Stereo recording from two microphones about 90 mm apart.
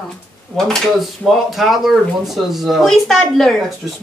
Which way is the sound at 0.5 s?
5° left (ahead or behind).